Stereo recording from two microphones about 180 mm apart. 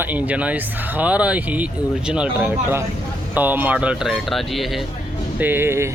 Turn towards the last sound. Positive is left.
turn(degrees=-15)  # may be behind; listen again after turning